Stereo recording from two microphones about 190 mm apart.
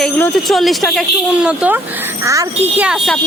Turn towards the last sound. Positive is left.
turn(degrees=0)  # may be behind; listen again after turning